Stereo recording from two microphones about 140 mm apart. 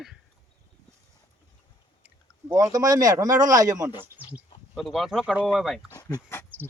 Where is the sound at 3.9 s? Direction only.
35° left (ahead or behind).